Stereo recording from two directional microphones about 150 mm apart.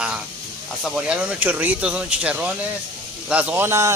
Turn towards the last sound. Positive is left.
turn(degrees=-15)  # may be behind; listen again after turning